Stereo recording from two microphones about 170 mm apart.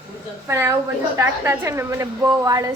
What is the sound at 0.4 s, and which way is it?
A woman's voice, 15° right (ahead or behind).